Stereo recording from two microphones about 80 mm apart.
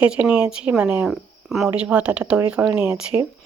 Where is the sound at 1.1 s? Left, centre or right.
Centre.